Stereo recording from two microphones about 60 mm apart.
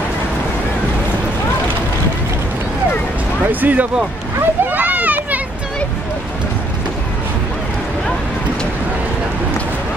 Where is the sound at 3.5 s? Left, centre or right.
Right.